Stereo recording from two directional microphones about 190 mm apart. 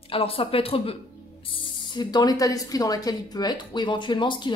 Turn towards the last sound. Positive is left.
turn(degrees=25)  # may be behind; listen again after turning